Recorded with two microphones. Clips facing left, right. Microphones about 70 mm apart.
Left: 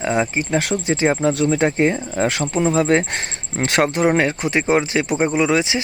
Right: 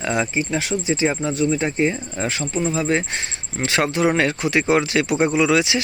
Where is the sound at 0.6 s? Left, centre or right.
Left.